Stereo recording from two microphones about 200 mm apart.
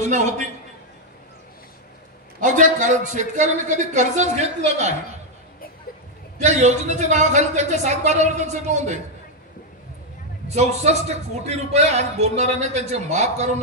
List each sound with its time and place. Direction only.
0.0 s a man's voice: 35° right (ahead or behind)
2.4 s a man's voice: 40° right (ahead or behind)
6.3 s a man's voice: 35° right (ahead or behind)
10.5 s a man's voice: 35° right (ahead or behind)